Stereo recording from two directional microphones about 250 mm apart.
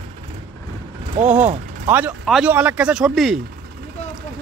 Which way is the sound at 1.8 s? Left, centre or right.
Centre.